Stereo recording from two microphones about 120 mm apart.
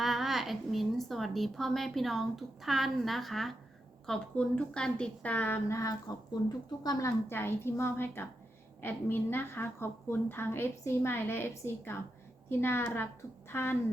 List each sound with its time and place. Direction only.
0.0 s a woman's voice: centre (ahead or behind); by 7.1 s 30° left (ahead or behind)
7.3 s a woman's voice: 20° left (ahead or behind)